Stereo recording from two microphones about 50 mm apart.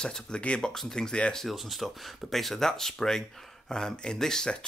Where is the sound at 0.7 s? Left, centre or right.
Centre.